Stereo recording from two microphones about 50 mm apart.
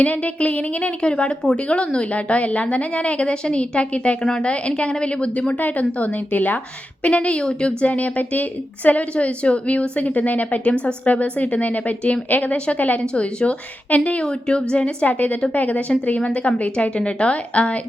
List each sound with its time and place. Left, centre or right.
0.0 s a woman's voice: left
7.0 s a woman's voice: left
7.9 s a woman's voice: left
15.0 s a woman's voice: left